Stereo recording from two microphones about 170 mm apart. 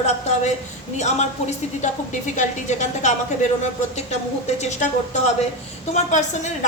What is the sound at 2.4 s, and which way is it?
Speech, 45° left (ahead or behind).